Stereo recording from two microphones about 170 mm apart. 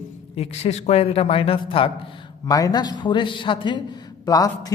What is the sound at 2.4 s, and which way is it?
A man's voice, 20° left (ahead or behind).